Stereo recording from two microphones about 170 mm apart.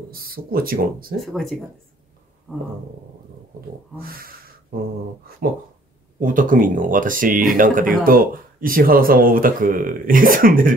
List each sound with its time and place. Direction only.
0.1 s speech: 60° right (ahead or behind)
1.2 s speech: centre (ahead or behind)
3.9 s speech: 60° right (ahead or behind)
6.1 s speech: 50° right (ahead or behind)